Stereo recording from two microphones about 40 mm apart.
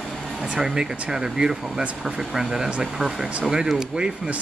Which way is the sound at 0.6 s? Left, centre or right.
Centre.